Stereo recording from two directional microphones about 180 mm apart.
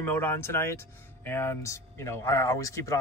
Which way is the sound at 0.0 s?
10° left (ahead or behind).